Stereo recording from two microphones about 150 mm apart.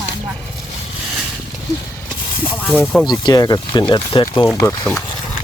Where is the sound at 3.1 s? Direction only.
25° left (ahead or behind).